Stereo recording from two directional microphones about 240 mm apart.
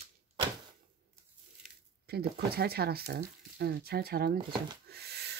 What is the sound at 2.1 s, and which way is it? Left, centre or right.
Speech, right.